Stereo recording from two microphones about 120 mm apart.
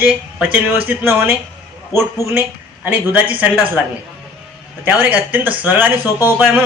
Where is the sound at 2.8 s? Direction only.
10° right (ahead or behind).